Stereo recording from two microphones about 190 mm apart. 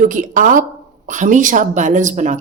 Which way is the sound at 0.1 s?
45° right (ahead or behind).